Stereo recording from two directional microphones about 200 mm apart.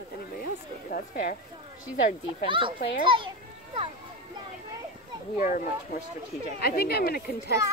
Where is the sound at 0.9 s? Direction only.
40° left (ahead or behind).